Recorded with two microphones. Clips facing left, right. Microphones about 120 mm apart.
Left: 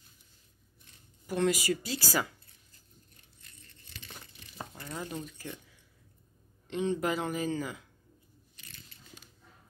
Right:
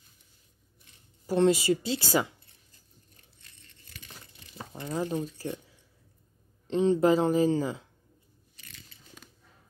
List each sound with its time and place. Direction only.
1.2 s speech: 30° right (ahead or behind)
4.7 s speech: 25° right (ahead or behind)